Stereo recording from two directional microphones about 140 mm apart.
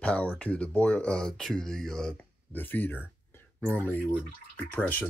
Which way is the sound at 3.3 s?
10° left (ahead or behind).